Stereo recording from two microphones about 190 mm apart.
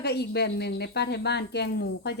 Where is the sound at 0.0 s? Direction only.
60° left (ahead or behind).